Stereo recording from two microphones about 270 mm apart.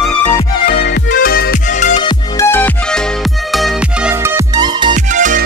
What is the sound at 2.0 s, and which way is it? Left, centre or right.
Music, centre.